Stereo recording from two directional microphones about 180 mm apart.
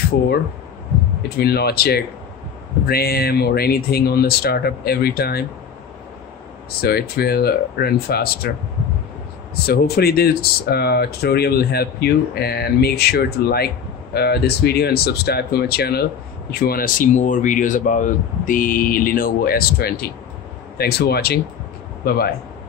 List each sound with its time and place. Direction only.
1.4 s speech: 60° left (ahead or behind)
6.8 s speech: 60° left (ahead or behind)
9.7 s speech: 60° left (ahead or behind)